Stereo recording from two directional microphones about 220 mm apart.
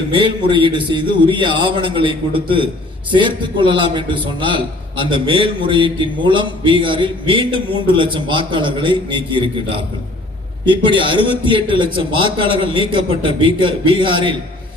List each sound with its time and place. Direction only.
0.2 s a man's voice: 20° right (ahead or behind)